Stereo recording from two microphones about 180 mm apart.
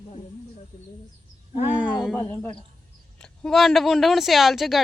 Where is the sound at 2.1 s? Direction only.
10° left (ahead or behind).